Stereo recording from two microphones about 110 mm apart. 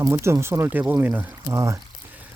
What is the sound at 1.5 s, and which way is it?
Speech, 30° right (ahead or behind).